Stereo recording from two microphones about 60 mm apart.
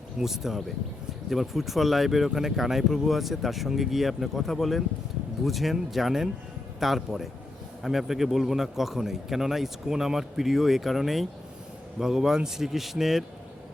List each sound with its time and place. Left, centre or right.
0.2 s speech: centre